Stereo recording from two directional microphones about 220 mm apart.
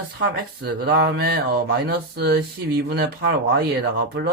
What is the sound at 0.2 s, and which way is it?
Speech, 45° right (ahead or behind).